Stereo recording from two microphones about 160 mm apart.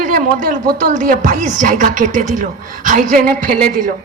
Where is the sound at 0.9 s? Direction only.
55° right (ahead or behind).